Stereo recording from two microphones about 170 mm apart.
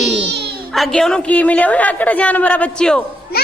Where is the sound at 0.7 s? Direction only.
Centre (ahead or behind).